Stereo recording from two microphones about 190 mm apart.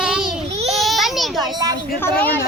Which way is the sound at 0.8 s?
Centre (ahead or behind).